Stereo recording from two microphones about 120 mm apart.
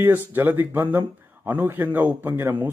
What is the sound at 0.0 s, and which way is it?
Speech, 15° right (ahead or behind).